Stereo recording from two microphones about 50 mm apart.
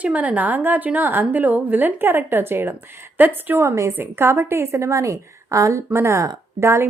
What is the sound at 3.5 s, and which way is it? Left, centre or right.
Speech, right.